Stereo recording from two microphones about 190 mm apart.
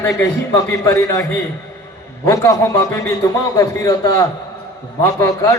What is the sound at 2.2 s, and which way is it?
A man's voice, 15° left (ahead or behind).